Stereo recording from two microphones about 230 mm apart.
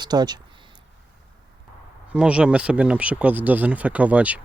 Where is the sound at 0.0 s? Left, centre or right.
Centre.